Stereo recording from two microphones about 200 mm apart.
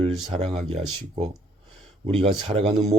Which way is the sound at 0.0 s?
30° right (ahead or behind).